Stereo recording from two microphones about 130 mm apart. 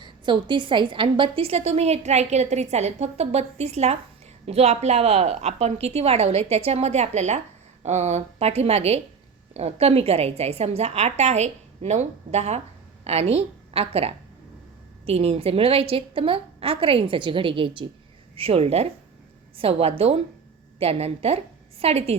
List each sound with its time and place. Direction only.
0.0 s a woman's voice: 40° right (ahead or behind)